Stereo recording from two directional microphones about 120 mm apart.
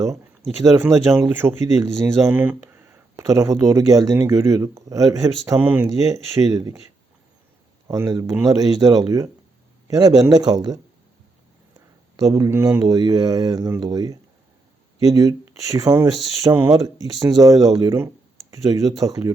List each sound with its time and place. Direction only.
0.6 s speech: 25° right (ahead or behind)
5.5 s speech: 15° right (ahead or behind)
5.9 s speech: 30° right (ahead or behind)
7.9 s speech: 30° right (ahead or behind)
12.1 s speech: 30° right (ahead or behind)